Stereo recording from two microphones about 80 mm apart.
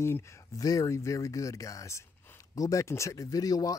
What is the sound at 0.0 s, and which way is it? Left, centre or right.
Speech, left.